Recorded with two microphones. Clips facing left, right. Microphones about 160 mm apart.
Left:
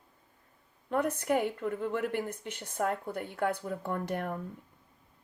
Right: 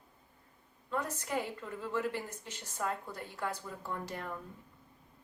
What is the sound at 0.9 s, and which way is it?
A woman's voice, 60° left (ahead or behind).